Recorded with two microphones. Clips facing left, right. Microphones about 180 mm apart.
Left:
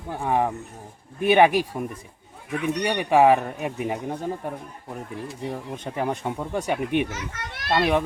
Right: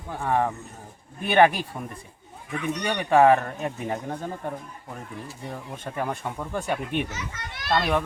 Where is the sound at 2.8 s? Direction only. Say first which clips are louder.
Even; 15° left (ahead or behind).